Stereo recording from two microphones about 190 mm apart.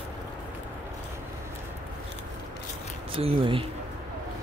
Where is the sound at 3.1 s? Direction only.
30° right (ahead or behind).